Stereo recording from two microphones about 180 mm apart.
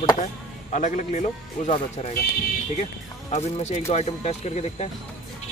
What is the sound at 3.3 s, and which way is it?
Speech, 40° left (ahead or behind).